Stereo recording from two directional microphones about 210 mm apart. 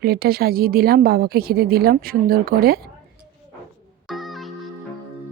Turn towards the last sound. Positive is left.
turn(degrees=0)  # may be behind; listen again after turning